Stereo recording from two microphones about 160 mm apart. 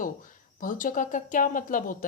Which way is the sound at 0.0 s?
55° left (ahead or behind).